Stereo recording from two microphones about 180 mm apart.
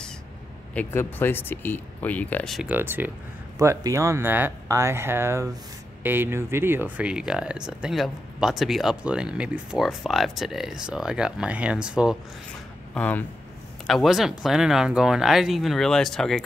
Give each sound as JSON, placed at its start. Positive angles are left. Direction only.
{"t": 0.7, "sound": "speech", "side_deg": 10}
{"t": 2.7, "sound": "speech", "side_deg": -10}
{"t": 12.9, "sound": "speech", "side_deg": 10}